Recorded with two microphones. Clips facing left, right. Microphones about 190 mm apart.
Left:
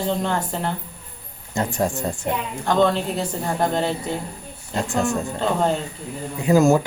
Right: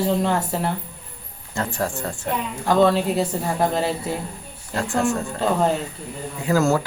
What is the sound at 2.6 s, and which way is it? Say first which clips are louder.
Speech: right 2 dB; 5° right (ahead or behind).